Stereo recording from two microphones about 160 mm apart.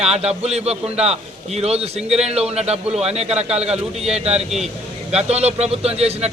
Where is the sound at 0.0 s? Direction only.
40° right (ahead or behind).